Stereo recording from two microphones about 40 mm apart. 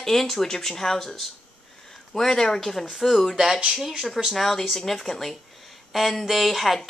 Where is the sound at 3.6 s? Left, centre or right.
Centre.